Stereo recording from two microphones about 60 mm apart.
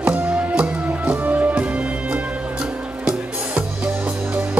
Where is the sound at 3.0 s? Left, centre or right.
Centre.